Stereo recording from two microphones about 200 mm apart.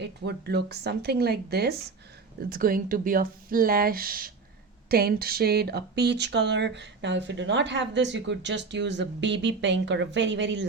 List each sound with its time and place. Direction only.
0.0 s speech: 55° right (ahead or behind)